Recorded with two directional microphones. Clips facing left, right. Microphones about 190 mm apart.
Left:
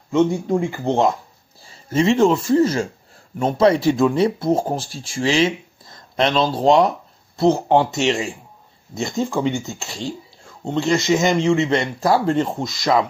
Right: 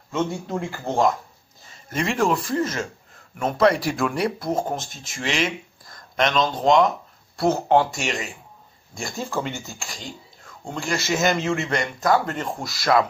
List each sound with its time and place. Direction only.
0.1 s a man's voice: 15° left (ahead or behind); by 6.9 s 35° left (ahead or behind)
7.3 s speech: 15° left (ahead or behind)